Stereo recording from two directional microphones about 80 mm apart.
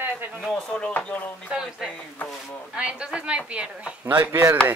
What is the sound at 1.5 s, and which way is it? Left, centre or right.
Speech, centre.